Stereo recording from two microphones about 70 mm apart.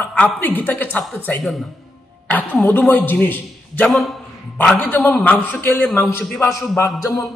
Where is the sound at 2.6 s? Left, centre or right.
Left.